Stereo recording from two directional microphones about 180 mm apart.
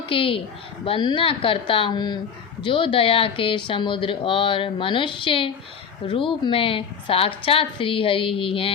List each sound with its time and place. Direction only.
0.0 s a woman's voice: 30° left (ahead or behind)